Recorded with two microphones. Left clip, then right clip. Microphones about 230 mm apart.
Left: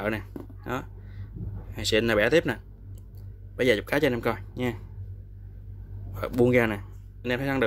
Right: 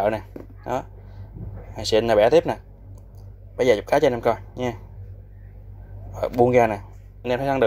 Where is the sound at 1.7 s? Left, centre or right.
Centre.